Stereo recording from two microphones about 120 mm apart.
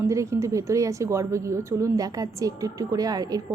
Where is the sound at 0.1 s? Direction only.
25° right (ahead or behind).